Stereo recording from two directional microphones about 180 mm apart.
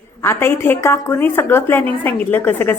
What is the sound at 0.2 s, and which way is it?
A woman's voice, 15° left (ahead or behind).